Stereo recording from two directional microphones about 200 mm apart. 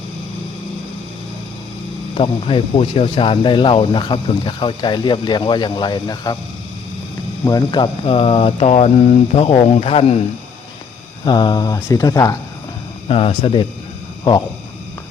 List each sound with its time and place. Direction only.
2.1 s speech: 25° left (ahead or behind)
7.4 s speech: 20° left (ahead or behind)
11.3 s speech: 20° left (ahead or behind)
13.1 s speech: 30° left (ahead or behind)